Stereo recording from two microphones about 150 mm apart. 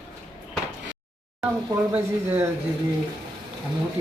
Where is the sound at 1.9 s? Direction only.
10° right (ahead or behind).